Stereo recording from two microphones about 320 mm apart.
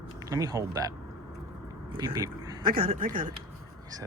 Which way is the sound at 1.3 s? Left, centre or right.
Centre.